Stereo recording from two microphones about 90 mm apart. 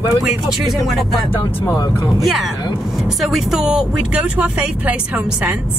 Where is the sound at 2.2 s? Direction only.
Centre (ahead or behind); by 5.6 s 15° right (ahead or behind).